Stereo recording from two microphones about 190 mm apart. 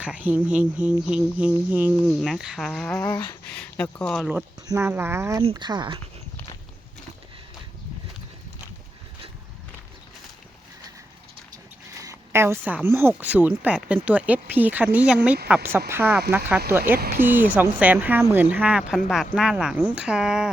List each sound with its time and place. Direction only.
0.0 s speech: 5° right (ahead or behind)
4.3 s speech: 10° right (ahead or behind)
5.4 s speech: 25° right (ahead or behind)
12.0 s a woman's voice: 15° right (ahead or behind)
17.2 s speech: 10° right (ahead or behind)